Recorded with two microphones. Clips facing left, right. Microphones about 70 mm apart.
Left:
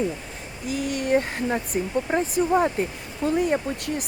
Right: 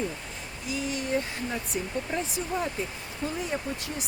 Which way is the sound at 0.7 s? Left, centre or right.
Left.